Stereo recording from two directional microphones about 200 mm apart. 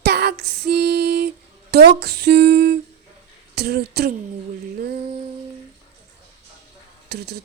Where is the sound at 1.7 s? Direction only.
55° right (ahead or behind).